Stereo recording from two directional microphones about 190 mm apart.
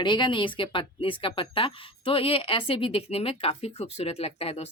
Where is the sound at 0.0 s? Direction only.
25° left (ahead or behind).